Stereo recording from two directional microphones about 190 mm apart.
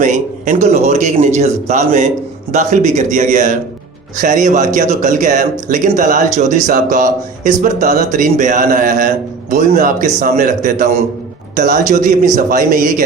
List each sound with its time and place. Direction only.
0.0 s a man's voice: 40° right (ahead or behind)